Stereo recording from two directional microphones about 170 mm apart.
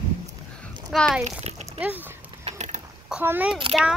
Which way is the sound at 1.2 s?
40° right (ahead or behind).